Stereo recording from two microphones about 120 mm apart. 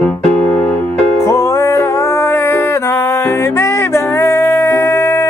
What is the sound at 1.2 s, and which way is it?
Music, 25° left (ahead or behind).